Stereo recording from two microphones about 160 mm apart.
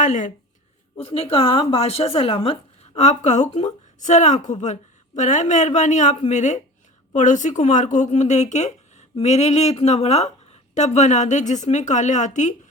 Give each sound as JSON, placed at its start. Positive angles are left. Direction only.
{"t": 0.0, "sound": "speech", "side_deg": 50}
{"t": 0.9, "sound": "speech", "side_deg": 35}